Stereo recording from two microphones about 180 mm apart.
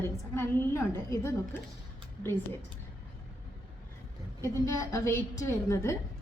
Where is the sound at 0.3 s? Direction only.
15° left (ahead or behind).